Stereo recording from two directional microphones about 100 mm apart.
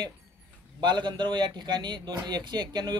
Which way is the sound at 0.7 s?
50° right (ahead or behind).